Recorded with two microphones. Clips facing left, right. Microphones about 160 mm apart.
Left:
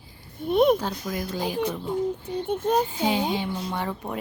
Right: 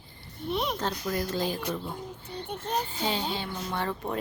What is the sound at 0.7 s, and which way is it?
Speech, 10° left (ahead or behind).